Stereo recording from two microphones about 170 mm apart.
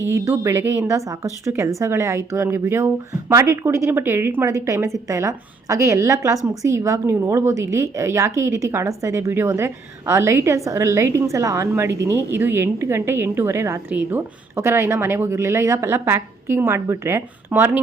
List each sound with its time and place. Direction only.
0.0 s a woman's voice: 15° right (ahead or behind)